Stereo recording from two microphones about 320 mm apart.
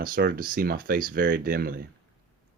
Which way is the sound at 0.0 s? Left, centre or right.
Right.